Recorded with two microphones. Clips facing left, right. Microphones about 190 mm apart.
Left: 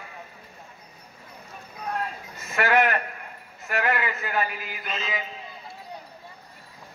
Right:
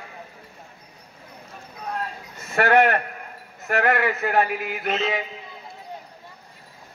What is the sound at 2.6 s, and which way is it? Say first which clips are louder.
Speech: right 4 dB; 55° right (ahead or behind).